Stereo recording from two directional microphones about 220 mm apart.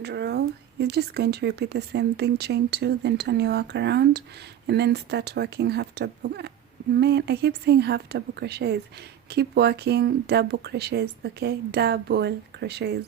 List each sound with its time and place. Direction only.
0.0 s speech: 50° right (ahead or behind)